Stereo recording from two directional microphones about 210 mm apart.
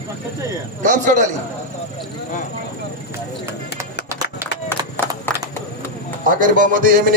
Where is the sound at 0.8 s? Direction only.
35° right (ahead or behind).